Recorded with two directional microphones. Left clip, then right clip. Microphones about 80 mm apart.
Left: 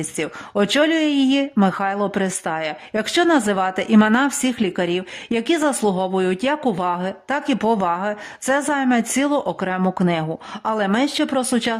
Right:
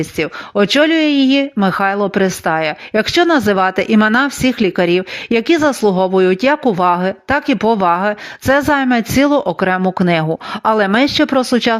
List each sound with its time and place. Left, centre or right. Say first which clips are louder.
0.0 s speech: right 7 dB; right
1.7 s speech: right 7 dB; right
2.0 s speech: right 7 dB; right
2.4 s speech: right 8 dB; right
2.9 s speech: right 5 dB; right
7.6 s speech: right 3 dB; right
7.9 s speech: right 8 dB; right